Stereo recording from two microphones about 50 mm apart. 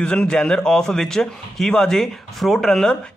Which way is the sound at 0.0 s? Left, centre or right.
Centre.